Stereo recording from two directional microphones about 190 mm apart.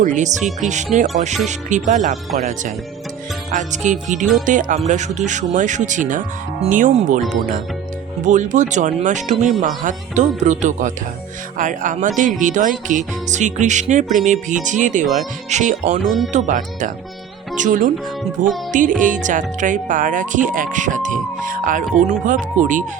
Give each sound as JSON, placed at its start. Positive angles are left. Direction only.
{"t": 0.0, "sound": "speech", "side_deg": -40}
{"t": 8.2, "sound": "speech", "side_deg": -40}
{"t": 16.0, "sound": "speech", "side_deg": 0}
{"t": 16.3, "sound": "speech", "side_deg": -45}